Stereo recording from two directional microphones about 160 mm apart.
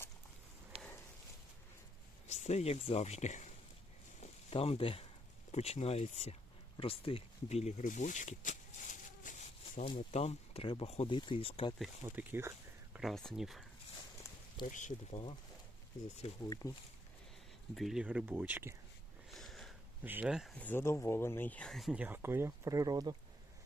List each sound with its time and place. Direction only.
0.7 s a sound: 40° right (ahead or behind)
2.2 s speech: 45° left (ahead or behind)
4.2 s a sound: 40° left (ahead or behind)
5.5 s speech: 40° left (ahead or behind)
9.8 s speech: 35° left (ahead or behind)
12.0 s speech: 15° right (ahead or behind)
13.0 s speech: centre (ahead or behind)
14.7 s speech: 50° left (ahead or behind)
16.5 s speech: 20° left (ahead or behind)
17.7 s speech: 5° right (ahead or behind)
19.3 s sniff: centre (ahead or behind)
20.0 s speech: 10° right (ahead or behind)
20.6 s speech: 10° left (ahead or behind); by 23.1 s 25° right (ahead or behind)